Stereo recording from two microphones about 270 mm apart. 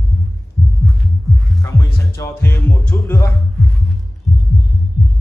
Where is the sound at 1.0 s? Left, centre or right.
Centre.